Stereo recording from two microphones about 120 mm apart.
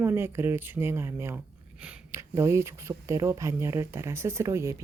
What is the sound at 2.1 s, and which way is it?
Speech, 25° right (ahead or behind).